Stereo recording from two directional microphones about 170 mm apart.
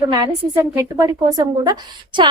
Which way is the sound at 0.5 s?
10° right (ahead or behind).